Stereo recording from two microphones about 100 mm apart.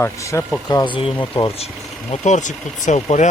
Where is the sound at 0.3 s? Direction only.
25° left (ahead or behind).